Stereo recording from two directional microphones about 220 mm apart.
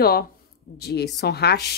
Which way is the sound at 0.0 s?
45° left (ahead or behind).